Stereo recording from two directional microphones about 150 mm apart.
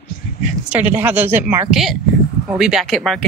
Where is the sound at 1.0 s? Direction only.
10° right (ahead or behind).